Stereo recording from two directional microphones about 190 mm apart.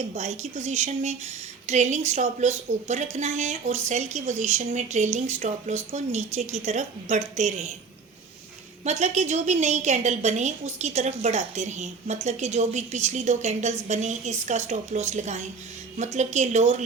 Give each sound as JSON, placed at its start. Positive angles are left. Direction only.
{"t": 0.1, "sound": "a woman's voice", "side_deg": -35}
{"t": 8.8, "sound": "a woman's voice", "side_deg": -35}